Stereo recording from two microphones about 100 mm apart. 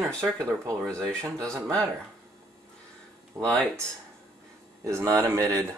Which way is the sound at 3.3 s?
30° right (ahead or behind).